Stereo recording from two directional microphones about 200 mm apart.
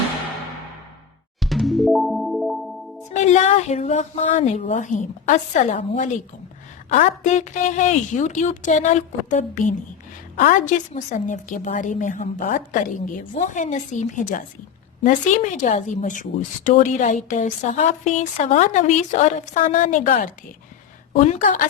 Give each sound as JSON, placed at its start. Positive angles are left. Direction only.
{"t": 1.4, "sound": "music", "side_deg": 0}
{"t": 3.2, "sound": "a woman's voice", "side_deg": 35}